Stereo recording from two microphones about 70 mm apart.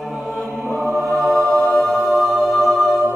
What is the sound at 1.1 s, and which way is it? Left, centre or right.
Music, centre.